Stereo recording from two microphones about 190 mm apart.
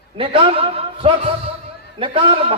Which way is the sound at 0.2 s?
30° right (ahead or behind).